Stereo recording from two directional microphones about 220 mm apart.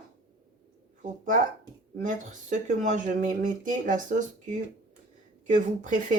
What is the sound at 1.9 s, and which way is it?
Speech, 35° right (ahead or behind).